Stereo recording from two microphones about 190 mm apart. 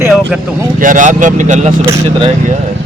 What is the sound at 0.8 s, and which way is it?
Speech, 45° right (ahead or behind).